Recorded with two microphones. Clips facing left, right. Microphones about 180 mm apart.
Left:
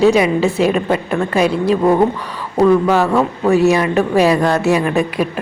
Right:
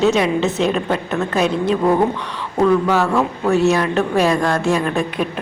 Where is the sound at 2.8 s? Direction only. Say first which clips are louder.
Left 3 dB; 10° left (ahead or behind).